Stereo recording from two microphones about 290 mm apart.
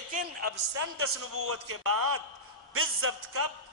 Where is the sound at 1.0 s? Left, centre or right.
Right.